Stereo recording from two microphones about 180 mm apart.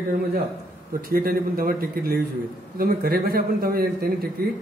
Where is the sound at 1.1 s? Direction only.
55° right (ahead or behind).